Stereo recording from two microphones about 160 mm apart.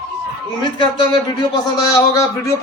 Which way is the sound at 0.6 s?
30° left (ahead or behind).